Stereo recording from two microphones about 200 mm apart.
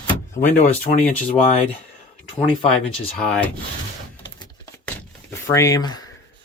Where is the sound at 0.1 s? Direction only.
15° left (ahead or behind).